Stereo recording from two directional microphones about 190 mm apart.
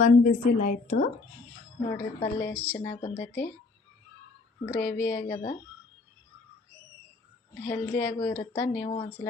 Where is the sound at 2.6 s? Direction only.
15° left (ahead or behind).